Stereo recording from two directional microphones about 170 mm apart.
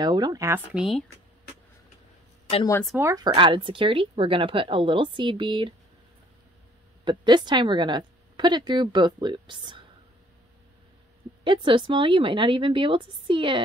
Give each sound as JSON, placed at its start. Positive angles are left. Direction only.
{"t": 0.0, "sound": "a woman's voice", "side_deg": -25}
{"t": 0.7, "sound": "speech", "side_deg": 0}
{"t": 3.0, "sound": "speech", "side_deg": -15}
{"t": 3.3, "sound": "a woman's voice", "side_deg": -30}
{"t": 7.1, "sound": "a woman's voice", "side_deg": -25}
{"t": 11.4, "sound": "a woman's voice", "side_deg": -30}